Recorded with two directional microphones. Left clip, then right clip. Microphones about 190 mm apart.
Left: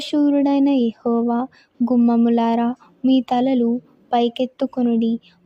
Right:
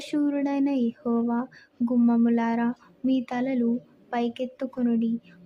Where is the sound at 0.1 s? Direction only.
35° left (ahead or behind).